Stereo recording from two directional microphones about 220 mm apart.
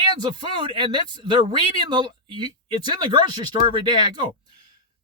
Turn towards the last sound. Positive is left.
turn(degrees=-20)  # may be behind; listen again after turning